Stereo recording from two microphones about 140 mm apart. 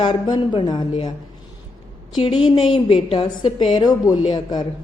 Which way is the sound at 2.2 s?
40° left (ahead or behind).